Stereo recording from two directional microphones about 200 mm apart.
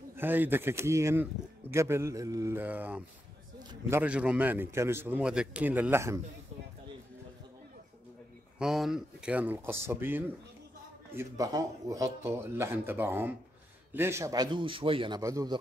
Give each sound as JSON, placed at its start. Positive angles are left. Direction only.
{"t": 0.1, "sound": "speech", "side_deg": -10}
{"t": 4.0, "sound": "speech", "side_deg": -5}
{"t": 8.5, "sound": "speech", "side_deg": 0}